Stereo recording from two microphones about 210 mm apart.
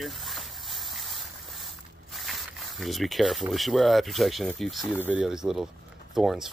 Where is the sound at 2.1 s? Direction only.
Centre (ahead or behind).